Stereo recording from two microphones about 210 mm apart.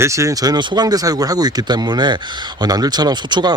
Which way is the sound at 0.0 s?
15° right (ahead or behind).